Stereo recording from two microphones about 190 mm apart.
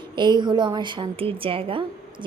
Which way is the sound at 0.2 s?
25° right (ahead or behind).